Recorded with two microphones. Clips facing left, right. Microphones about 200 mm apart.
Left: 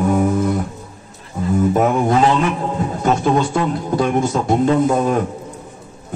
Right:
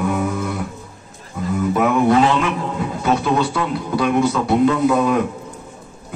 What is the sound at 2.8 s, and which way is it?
A man's voice, 45° left (ahead or behind).